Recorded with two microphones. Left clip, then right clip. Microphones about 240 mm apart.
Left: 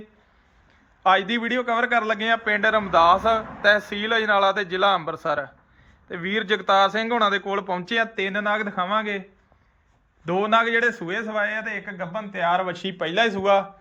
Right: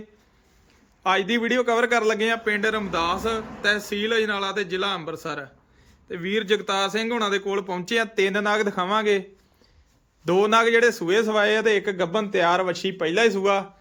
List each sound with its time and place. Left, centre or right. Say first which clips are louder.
1.0 s a man's voice: left 2 dB; centre
10.2 s a man's voice: right 2 dB; right